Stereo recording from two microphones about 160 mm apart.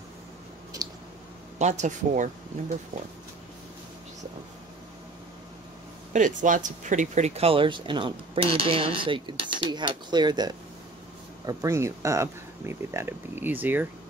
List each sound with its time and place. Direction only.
0.8 s clicking: 20° right (ahead or behind)
1.6 s speech: 45° right (ahead or behind)
6.1 s speech: 55° right (ahead or behind); by 13.8 s 10° right (ahead or behind)